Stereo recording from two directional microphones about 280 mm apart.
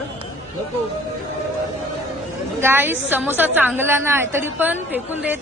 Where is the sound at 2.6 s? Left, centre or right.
Centre.